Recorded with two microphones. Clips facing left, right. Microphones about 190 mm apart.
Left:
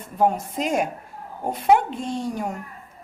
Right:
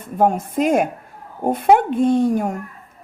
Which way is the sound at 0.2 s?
55° right (ahead or behind).